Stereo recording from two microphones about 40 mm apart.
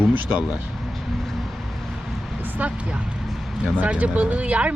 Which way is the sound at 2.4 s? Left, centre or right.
Right.